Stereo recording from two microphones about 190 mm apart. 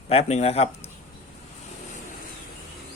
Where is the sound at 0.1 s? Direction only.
35° left (ahead or behind).